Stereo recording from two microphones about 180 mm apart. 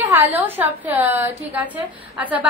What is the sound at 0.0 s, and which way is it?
A woman's voice, 10° right (ahead or behind).